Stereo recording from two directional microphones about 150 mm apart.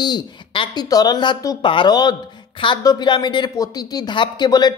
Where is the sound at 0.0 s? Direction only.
30° left (ahead or behind).